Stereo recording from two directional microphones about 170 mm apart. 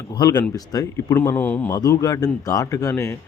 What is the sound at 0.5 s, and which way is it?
A man's voice, 20° left (ahead or behind).